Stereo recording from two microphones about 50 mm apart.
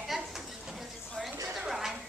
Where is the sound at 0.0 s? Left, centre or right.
Centre.